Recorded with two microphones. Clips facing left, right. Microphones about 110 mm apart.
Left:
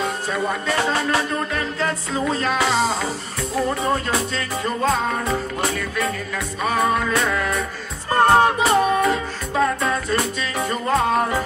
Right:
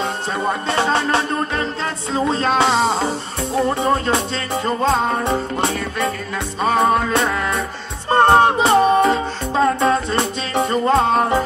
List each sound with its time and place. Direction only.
0.0 s music: 30° right (ahead or behind)